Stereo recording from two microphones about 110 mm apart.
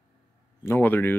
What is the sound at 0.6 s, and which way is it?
Speech, 20° left (ahead or behind).